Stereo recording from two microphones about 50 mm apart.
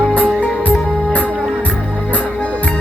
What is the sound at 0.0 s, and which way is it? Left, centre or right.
Music, left.